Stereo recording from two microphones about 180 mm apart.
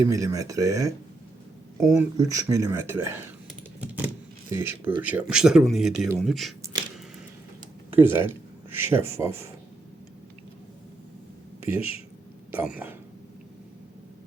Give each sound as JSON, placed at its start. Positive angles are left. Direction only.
{"t": 0.0, "sound": "speech", "side_deg": -20}
{"t": 3.8, "sound": "keys jangling", "side_deg": -10}
{"t": 4.5, "sound": "speech", "side_deg": -10}
{"t": 7.9, "sound": "speech", "side_deg": -10}
{"t": 12.5, "sound": "speech", "side_deg": -10}